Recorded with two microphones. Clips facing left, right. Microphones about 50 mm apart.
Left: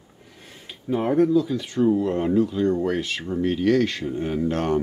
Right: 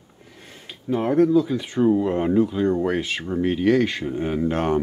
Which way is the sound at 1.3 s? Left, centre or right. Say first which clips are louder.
Right 2 dB; centre.